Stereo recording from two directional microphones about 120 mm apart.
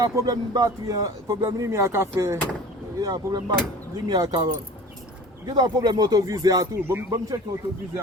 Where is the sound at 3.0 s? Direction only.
35° right (ahead or behind).